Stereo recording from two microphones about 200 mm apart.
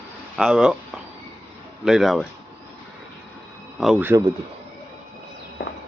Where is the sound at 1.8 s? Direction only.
Centre (ahead or behind).